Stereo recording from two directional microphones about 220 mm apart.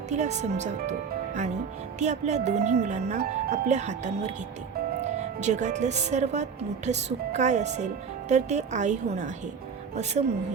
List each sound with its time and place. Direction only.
0.1 s speech: 30° right (ahead or behind)
5.4 s speech: 30° right (ahead or behind)